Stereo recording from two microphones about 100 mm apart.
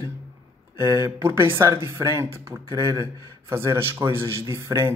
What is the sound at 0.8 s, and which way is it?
Speech, 30° right (ahead or behind).